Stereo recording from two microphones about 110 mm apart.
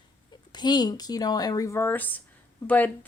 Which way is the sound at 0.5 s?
40° left (ahead or behind).